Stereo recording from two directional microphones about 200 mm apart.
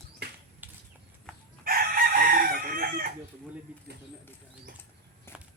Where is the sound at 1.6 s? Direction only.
45° right (ahead or behind).